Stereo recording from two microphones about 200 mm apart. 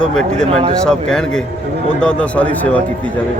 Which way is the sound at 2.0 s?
5° left (ahead or behind).